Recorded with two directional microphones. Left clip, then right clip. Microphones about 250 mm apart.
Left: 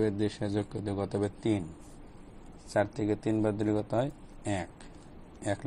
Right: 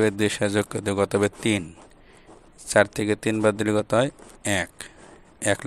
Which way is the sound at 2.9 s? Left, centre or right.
Right.